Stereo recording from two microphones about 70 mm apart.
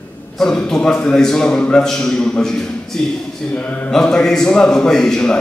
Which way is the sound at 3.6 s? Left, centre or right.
Centre.